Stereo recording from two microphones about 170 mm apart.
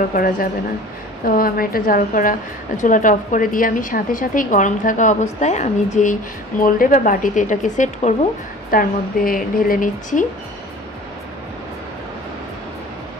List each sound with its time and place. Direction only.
0.1 s a woman's voice: 60° left (ahead or behind)